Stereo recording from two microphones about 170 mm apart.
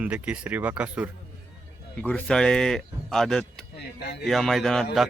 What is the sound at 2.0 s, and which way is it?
Speech, 10° left (ahead or behind).